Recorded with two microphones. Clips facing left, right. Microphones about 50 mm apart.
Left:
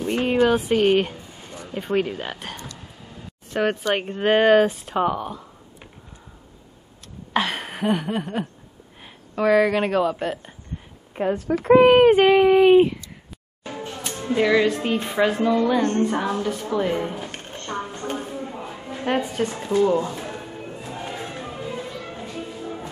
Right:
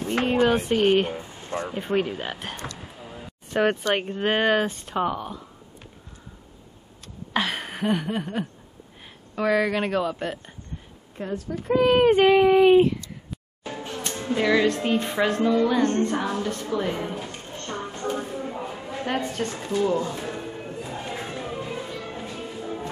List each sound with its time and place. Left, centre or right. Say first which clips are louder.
0.2 s speech: left 2 dB; centre
1.1 s a sound: right 5 dB; right
1.7 s speech: left 3 dB; centre
2.8 s a sound: right 2 dB; centre
4.0 s speech: left 5 dB; centre
7.3 s a sound: left 2 dB; centre
9.3 s speech: left 4 dB; centre
11.1 s speech: left 7 dB; left
11.4 s speech: left 8 dB; left
12.0 s a woman's voice: left 3 dB; centre
19.0 s a woman's voice: left 5 dB; centre
22.0 s music: left 1 dB; centre